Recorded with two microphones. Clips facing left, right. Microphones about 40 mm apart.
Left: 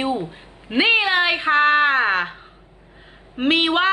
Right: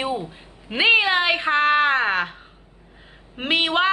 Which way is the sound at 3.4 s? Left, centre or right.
Centre.